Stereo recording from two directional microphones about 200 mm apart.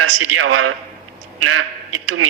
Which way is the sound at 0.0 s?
90° right.